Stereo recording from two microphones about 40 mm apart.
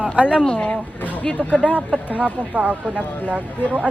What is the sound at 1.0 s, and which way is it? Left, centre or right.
Speech, left.